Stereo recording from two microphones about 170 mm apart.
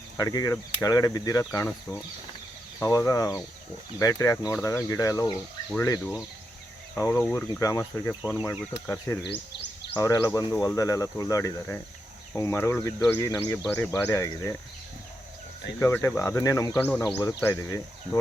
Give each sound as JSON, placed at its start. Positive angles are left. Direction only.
{"t": 0.2, "sound": "speech", "side_deg": 20}
{"t": 15.8, "sound": "speech", "side_deg": 15}